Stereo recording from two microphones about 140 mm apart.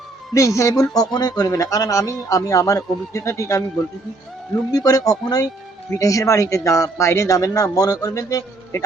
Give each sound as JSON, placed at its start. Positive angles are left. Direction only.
{"t": 0.3, "sound": "speech", "side_deg": 20}
{"t": 4.7, "sound": "speech", "side_deg": 25}